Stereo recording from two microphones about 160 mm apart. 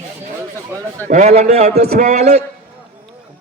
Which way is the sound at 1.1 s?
50° right (ahead or behind).